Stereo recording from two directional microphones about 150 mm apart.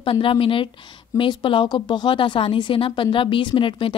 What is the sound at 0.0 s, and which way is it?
Speech, 35° left (ahead or behind).